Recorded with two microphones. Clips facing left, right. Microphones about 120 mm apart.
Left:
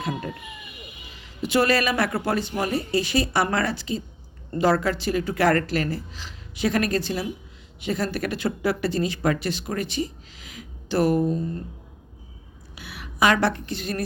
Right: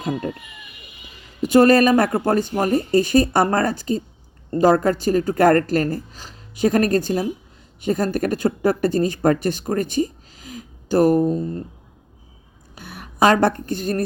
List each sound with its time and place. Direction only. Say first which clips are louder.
0.0 s speech: right 4 dB; 40° right (ahead or behind)
1.4 s speech: right 8 dB; 45° right (ahead or behind)
12.7 s a sound: right 3 dB; 45° right (ahead or behind)
13.1 s speech: right 5 dB; 40° right (ahead or behind)